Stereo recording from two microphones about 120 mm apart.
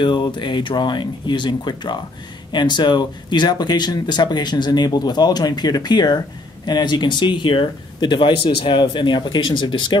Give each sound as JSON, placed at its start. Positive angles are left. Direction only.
{"t": 0.0, "sound": "speech", "side_deg": 40}